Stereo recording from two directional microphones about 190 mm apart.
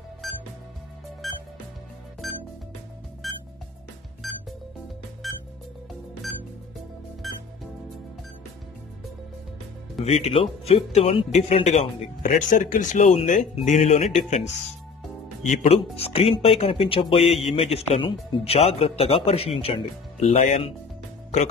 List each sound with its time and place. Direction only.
0.2 s music: centre (ahead or behind)
7.2 s music: centre (ahead or behind)
10.0 s speech: 35° left (ahead or behind)
15.4 s speech: 35° left (ahead or behind)